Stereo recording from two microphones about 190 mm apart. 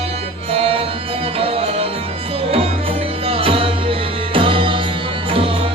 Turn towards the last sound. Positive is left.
turn(degrees=-25)  # may be behind; listen again after turning